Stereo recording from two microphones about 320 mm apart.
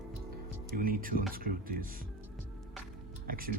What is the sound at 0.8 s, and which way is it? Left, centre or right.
Speech, right.